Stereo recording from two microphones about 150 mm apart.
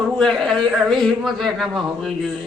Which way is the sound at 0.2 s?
5° left (ahead or behind).